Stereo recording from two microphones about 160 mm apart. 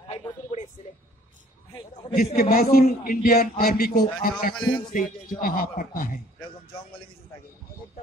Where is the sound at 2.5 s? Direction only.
70° left (ahead or behind).